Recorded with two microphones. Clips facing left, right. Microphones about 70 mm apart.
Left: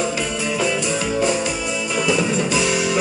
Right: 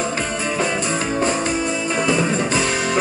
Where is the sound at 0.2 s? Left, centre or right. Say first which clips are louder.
Even; right.